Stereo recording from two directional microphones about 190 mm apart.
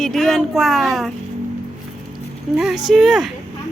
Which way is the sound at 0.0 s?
Centre (ahead or behind).